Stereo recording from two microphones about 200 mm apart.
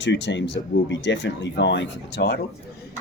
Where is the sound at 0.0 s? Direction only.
60° left (ahead or behind).